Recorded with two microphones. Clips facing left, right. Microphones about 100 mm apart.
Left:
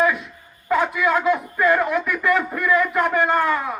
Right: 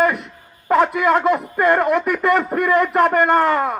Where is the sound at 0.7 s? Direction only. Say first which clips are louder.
Right 4 dB; 55° right (ahead or behind).